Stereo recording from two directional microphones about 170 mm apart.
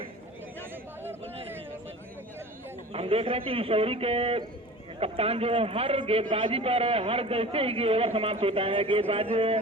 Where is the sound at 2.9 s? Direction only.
35° right (ahead or behind).